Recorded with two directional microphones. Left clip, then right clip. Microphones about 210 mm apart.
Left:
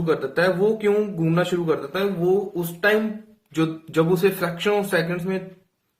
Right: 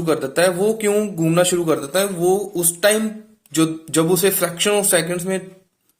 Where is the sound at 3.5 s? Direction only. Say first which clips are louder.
Right 5 dB; 30° right (ahead or behind).